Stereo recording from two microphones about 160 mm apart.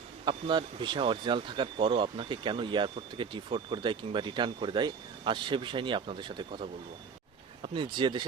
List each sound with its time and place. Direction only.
0.3 s speech: 30° right (ahead or behind)